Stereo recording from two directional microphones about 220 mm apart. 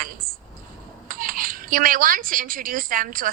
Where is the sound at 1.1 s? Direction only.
40° right (ahead or behind).